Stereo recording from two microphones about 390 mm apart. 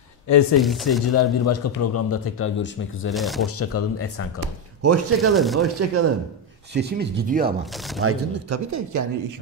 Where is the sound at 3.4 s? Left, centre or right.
Left.